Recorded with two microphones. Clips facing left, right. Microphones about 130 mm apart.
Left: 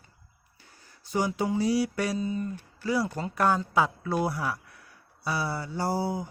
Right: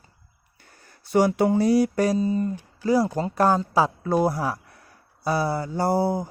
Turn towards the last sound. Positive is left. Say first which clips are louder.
# right 6 dB
turn(degrees=-50)  # may be behind; listen again after turning